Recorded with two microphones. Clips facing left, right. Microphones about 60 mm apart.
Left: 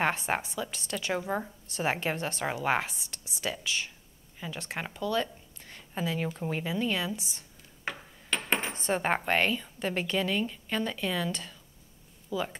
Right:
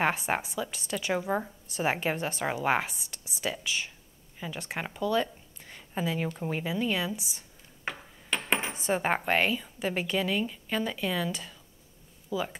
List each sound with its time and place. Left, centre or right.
0.0 s speech: centre